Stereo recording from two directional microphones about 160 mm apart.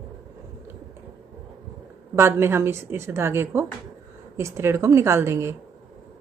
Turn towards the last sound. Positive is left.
turn(degrees=-15)  # may be behind; listen again after turning